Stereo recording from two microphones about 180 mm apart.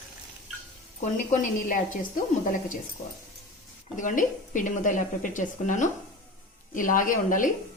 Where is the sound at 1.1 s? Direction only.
45° left (ahead or behind).